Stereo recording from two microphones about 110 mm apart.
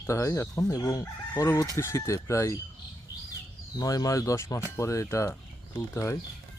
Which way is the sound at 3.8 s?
35° left (ahead or behind).